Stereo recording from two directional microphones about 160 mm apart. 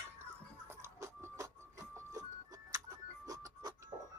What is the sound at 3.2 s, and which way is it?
Music, 20° right (ahead or behind).